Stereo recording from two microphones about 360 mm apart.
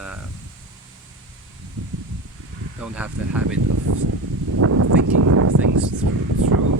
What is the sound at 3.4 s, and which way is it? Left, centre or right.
Speech, right.